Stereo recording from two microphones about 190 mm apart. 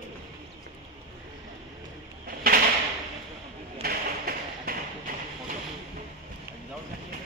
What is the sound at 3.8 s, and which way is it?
Tap, 50° right (ahead or behind).